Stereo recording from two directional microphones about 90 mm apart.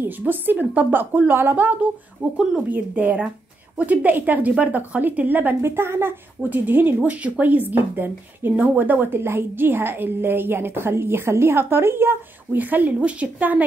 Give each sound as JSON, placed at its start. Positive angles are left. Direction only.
{"t": 0.0, "sound": "a woman's voice", "side_deg": -20}